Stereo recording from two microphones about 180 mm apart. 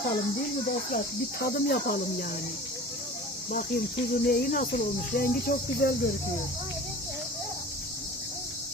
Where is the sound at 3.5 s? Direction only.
60° left (ahead or behind).